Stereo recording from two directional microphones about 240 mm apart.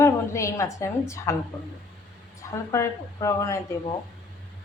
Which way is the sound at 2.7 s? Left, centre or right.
Centre.